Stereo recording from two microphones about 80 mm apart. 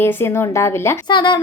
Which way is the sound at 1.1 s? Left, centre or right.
Left.